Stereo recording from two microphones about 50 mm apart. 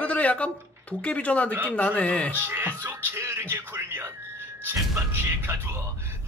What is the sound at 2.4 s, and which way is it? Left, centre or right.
Speech, right.